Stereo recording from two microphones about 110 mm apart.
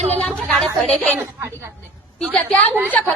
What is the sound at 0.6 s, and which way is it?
Speech, 5° left (ahead or behind).